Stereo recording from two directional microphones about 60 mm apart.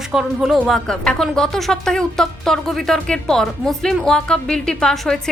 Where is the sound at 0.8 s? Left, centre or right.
Centre.